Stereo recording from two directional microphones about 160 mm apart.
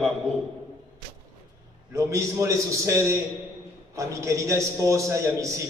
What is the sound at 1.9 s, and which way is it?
A man's voice, 20° right (ahead or behind).